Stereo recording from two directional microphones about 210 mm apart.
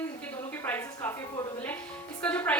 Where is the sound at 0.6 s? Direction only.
10° left (ahead or behind).